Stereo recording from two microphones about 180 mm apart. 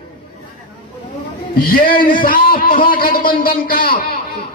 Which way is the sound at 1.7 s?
50° left (ahead or behind).